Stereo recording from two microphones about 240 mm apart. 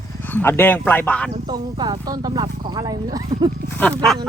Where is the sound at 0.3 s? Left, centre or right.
Centre.